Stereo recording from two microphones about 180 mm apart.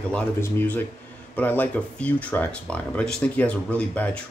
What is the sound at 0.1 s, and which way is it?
Speech, 10° left (ahead or behind).